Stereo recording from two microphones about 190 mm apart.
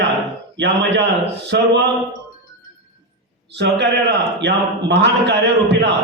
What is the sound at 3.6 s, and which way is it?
Speech, 65° right (ahead or behind).